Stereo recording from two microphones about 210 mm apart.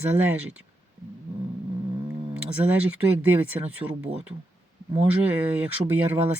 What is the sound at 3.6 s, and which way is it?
Speech, 20° right (ahead or behind).